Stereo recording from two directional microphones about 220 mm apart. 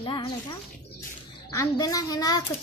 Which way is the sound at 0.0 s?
20° left (ahead or behind).